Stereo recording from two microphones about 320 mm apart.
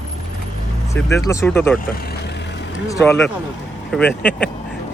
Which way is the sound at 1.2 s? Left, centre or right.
Centre.